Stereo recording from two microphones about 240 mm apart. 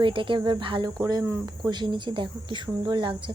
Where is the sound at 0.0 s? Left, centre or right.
Right.